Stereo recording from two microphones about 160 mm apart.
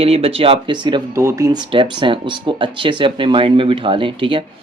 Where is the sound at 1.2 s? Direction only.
20° right (ahead or behind).